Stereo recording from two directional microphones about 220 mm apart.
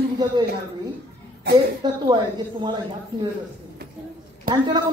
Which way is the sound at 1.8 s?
20° right (ahead or behind).